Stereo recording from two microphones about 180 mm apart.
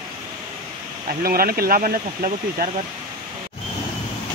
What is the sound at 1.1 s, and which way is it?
Speech, 55° right (ahead or behind).